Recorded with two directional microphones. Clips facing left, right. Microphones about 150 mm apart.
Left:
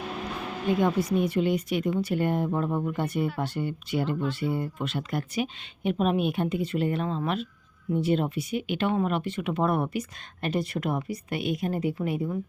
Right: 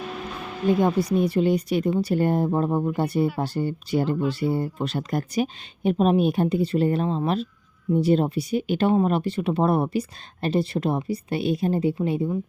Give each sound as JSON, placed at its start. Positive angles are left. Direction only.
{"t": 0.7, "sound": "speech", "side_deg": -35}